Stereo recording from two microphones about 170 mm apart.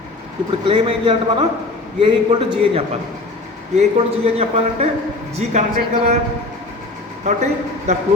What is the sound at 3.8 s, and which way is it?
A man's voice, 35° right (ahead or behind).